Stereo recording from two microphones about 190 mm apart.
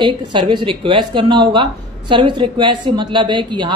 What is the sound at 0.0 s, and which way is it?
A woman's voice, 25° right (ahead or behind).